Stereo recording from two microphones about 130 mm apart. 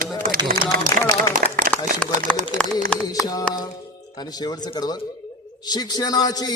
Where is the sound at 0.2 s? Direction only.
90° right.